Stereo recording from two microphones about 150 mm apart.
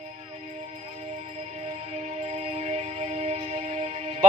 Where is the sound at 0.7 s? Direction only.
45° right (ahead or behind).